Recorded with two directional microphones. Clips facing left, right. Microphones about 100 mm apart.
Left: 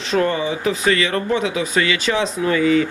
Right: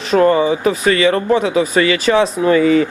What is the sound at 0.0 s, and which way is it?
Speech, 45° right (ahead or behind).